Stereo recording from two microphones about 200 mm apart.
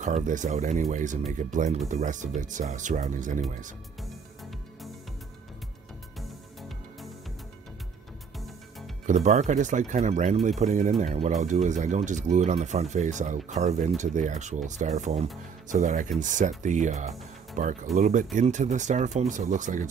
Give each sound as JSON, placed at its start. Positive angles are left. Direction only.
{"t": 0.0, "sound": "speech", "side_deg": -40}
{"t": 9.0, "sound": "speech", "side_deg": -40}